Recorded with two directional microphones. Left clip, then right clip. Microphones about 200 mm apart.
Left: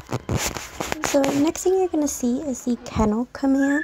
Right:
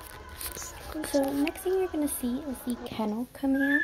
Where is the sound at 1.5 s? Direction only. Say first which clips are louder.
Left 8 dB; 40° left (ahead or behind).